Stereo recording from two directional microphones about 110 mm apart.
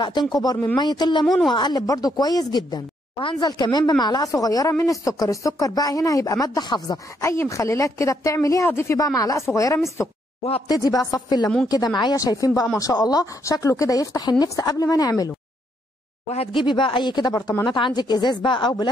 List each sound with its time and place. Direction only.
0.0 s speech: 40° left (ahead or behind)
1.2 s speech: centre (ahead or behind)
1.5 s speech: 40° left (ahead or behind)
7.2 s a woman's voice: 25° left (ahead or behind)
16.5 s speech: 50° left (ahead or behind)